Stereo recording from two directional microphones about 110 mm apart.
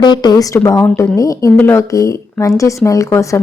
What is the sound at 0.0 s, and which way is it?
Speech, 40° left (ahead or behind).